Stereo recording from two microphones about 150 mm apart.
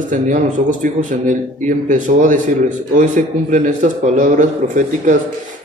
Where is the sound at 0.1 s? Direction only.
60° right (ahead or behind).